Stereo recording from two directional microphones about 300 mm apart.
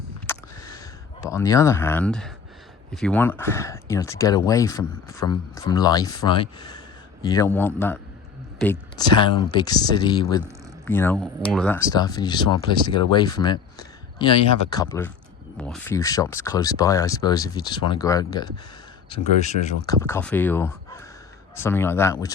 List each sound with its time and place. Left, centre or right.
0.3 s a sound: centre
2.9 s speech: centre; by 19.7 s left
19.8 s speech: centre